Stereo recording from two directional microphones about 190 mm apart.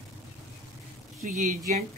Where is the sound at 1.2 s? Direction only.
40° right (ahead or behind).